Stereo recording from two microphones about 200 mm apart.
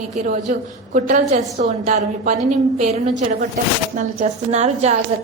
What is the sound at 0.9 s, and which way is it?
Speech, 40° right (ahead or behind).